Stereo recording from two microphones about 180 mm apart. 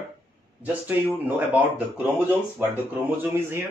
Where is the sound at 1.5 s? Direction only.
10° right (ahead or behind).